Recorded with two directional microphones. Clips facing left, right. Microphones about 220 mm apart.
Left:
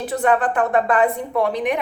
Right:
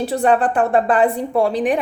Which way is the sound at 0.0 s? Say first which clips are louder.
Right 3 dB; 30° right (ahead or behind).